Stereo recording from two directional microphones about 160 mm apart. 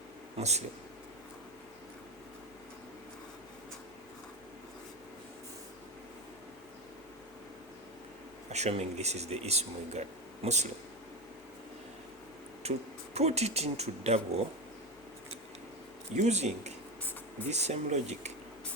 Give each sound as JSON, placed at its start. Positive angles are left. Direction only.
{"t": 0.3, "sound": "speech", "side_deg": -45}
{"t": 8.4, "sound": "speech", "side_deg": -45}
{"t": 12.6, "sound": "speech", "side_deg": -40}
{"t": 16.1, "sound": "speech", "side_deg": -45}